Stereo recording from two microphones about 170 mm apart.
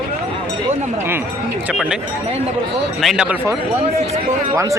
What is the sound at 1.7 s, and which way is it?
Speech, 5° right (ahead or behind).